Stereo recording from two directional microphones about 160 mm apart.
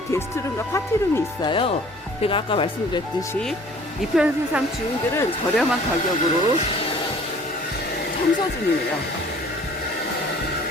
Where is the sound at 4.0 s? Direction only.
5° right (ahead or behind).